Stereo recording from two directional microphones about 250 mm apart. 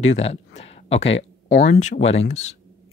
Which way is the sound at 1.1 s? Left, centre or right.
Left.